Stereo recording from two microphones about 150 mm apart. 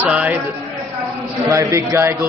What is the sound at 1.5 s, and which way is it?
Speech, 20° right (ahead or behind).